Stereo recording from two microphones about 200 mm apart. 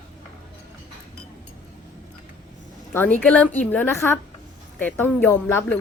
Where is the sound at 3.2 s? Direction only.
5° left (ahead or behind).